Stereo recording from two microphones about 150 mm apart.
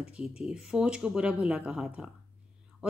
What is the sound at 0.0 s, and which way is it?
A woman's voice, 5° right (ahead or behind).